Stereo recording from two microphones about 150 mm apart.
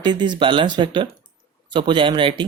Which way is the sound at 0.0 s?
30° right (ahead or behind).